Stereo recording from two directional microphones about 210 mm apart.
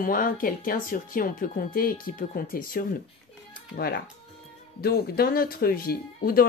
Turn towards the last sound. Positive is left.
turn(degrees=45)  # may be behind; listen again after turning